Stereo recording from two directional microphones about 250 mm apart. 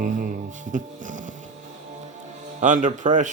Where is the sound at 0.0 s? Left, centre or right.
Right.